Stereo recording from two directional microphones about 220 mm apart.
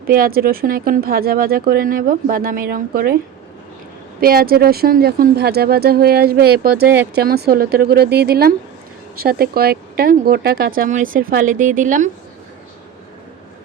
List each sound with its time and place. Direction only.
0.1 s speech: 45° right (ahead or behind)
4.2 s speech: 40° right (ahead or behind)